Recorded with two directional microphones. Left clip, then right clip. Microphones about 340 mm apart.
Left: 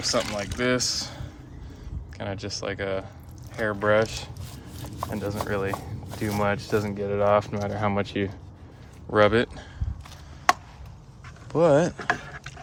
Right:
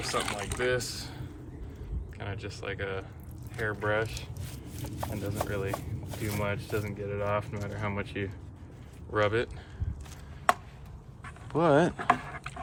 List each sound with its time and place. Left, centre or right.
0.0 s speech: centre
11.5 s speech: centre